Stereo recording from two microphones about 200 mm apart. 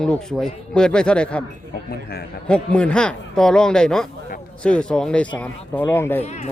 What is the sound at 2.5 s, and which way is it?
A man's voice, 5° left (ahead or behind).